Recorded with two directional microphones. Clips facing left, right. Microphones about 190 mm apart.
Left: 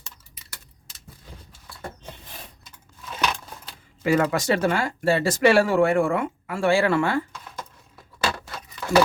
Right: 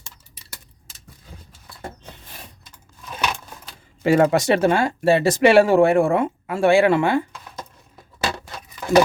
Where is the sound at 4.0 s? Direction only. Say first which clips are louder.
Right 5 dB; 30° right (ahead or behind).